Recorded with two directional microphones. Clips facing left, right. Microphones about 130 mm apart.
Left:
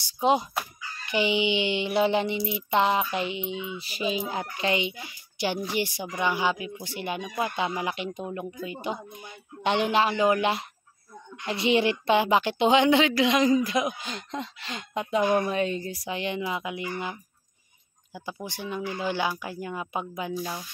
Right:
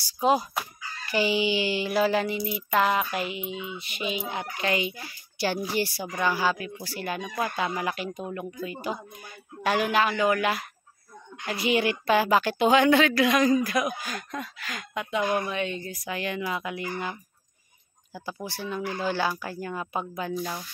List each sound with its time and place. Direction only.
0.0 s speech: 20° left (ahead or behind)
18.1 s speech: 20° left (ahead or behind)